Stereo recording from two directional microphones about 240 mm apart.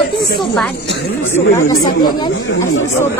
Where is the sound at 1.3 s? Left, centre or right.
Centre.